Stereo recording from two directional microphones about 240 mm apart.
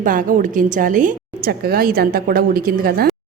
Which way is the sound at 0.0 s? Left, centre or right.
Right.